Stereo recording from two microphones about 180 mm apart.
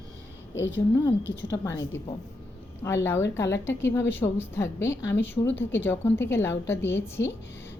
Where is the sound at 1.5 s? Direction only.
15° left (ahead or behind).